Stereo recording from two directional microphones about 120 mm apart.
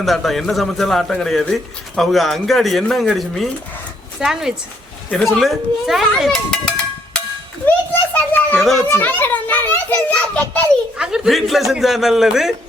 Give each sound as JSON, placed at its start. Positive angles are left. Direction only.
{"t": 0.0, "sound": "a man's voice", "side_deg": 0}
{"t": 8.1, "sound": "children playing", "side_deg": 15}
{"t": 8.9, "sound": "a child's voice", "side_deg": 15}
{"t": 10.9, "sound": "a man's voice", "side_deg": -5}